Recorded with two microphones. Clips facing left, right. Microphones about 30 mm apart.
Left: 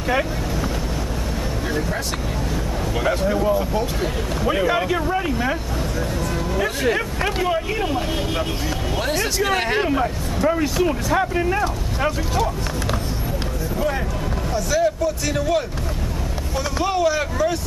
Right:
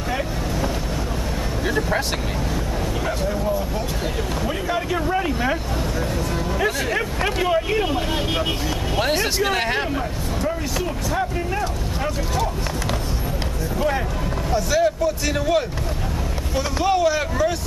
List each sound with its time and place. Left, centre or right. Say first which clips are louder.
3.0 s speech: left 7 dB; centre
4.8 s speech: left 1 dB; centre
9.4 s speech: left 1 dB; centre
9.8 s speech: left 4 dB; centre
13.7 s speech: right 1 dB; centre